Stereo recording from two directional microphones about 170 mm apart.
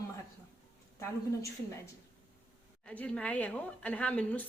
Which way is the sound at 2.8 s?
5° left (ahead or behind).